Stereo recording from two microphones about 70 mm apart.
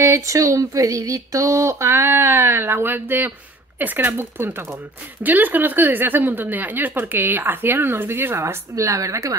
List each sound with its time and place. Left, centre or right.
0.0 s speech: right